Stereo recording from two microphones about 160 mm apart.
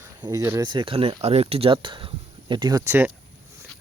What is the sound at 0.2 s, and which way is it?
Speech, 25° right (ahead or behind).